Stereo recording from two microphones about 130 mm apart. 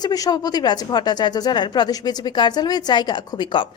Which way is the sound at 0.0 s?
30° left (ahead or behind).